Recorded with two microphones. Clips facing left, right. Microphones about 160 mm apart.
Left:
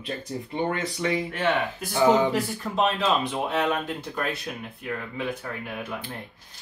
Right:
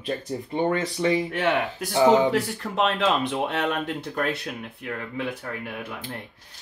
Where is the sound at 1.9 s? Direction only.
20° right (ahead or behind).